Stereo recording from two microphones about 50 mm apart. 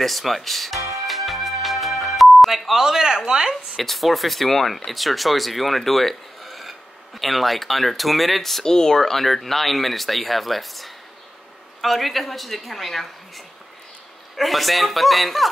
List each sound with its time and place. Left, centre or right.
0.0 s speech: centre
0.7 s music: right
1.0 s music: centre
3.7 s speech: centre
14.3 s speech: centre